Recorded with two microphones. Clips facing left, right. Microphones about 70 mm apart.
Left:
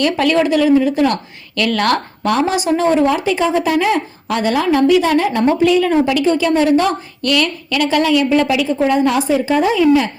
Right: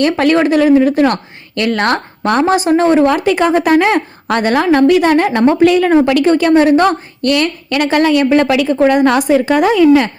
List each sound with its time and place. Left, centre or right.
0.0 s a woman's voice: right